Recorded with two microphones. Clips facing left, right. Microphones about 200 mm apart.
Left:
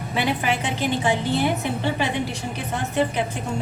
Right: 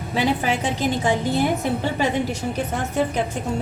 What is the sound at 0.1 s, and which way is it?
A woman's voice, 40° right (ahead or behind).